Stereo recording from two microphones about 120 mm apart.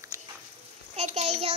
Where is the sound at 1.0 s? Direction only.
65° right (ahead or behind).